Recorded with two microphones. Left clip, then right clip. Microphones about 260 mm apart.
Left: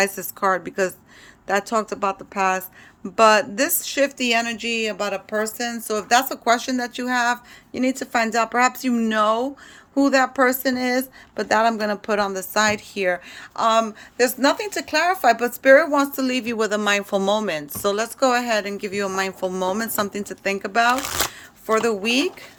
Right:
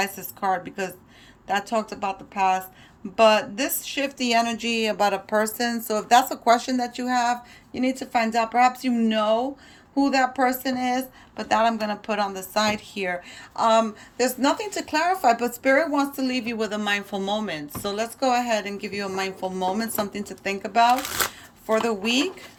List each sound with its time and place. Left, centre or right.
0.0 s speech: centre